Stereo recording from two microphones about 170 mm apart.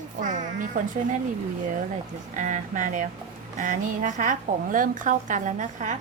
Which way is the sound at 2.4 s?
50° right (ahead or behind).